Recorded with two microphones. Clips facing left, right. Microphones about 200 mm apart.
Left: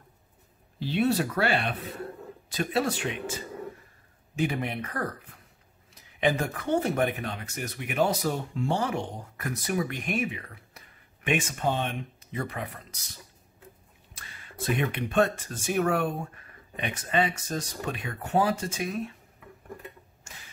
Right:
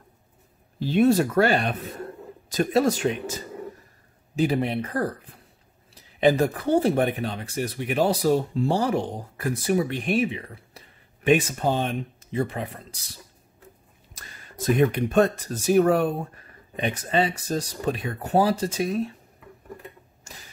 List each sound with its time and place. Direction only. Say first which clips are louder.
0.7 s speech: right 6 dB; 45° right (ahead or behind); by 13.2 s 30° right (ahead or behind)
14.1 s speech: right 2 dB; 40° right (ahead or behind)